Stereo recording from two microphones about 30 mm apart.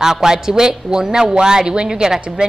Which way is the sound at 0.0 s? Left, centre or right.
Centre.